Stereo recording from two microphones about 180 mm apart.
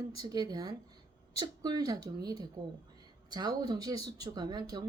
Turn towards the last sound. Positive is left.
turn(degrees=-25)  # may be behind; listen again after turning